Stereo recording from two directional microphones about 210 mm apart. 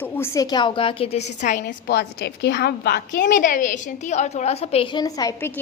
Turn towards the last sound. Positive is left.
turn(degrees=15)  # may be behind; listen again after turning